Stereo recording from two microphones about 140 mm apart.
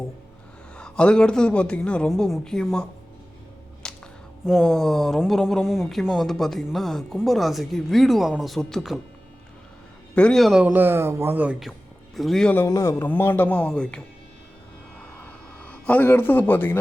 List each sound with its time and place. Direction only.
0.8 s speech: 5° left (ahead or behind)
3.8 s a sound: 5° left (ahead or behind)
4.4 s speech: centre (ahead or behind)
10.2 s speech: 5° left (ahead or behind); by 11.5 s 15° right (ahead or behind)
12.1 s speech: centre (ahead or behind)
12.6 s speech: 20° left (ahead or behind)
15.2 s a sound: 10° left (ahead or behind)